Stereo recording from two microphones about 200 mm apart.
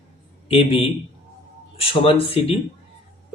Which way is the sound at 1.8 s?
30° left (ahead or behind).